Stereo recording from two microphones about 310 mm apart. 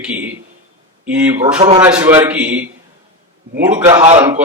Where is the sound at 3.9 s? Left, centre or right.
Centre.